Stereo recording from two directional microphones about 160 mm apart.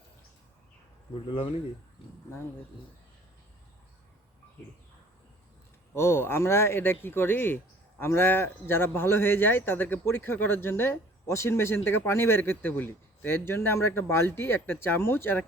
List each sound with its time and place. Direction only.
1.3 s speech: 35° left (ahead or behind)
5.9 s speech: 15° left (ahead or behind)